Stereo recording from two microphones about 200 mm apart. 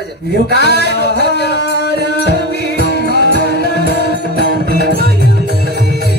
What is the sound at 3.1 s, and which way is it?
Music, 50° right (ahead or behind).